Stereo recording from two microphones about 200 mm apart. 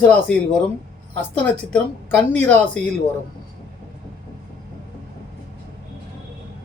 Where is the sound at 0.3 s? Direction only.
5° left (ahead or behind).